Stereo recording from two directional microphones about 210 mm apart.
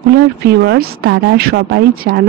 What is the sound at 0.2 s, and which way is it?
Speech, 50° right (ahead or behind).